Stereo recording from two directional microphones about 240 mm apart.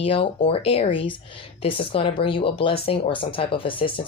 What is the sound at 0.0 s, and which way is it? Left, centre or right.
Speech, left.